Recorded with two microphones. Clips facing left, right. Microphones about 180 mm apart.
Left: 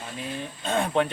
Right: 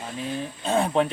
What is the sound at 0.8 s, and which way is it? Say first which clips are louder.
Speech: left 1 dB; centre (ahead or behind).